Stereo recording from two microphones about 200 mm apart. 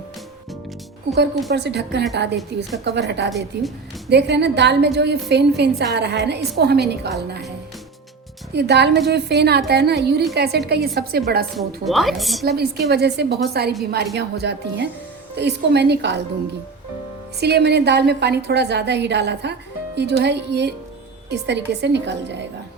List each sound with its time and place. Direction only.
1.5 s a woman's voice: 55° right (ahead or behind)
8.5 s a woman's voice: 55° right (ahead or behind)
11.5 s a woman's voice: centre (ahead or behind)
12.5 s a woman's voice: 55° right (ahead or behind)
17.4 s a woman's voice: 55° right (ahead or behind)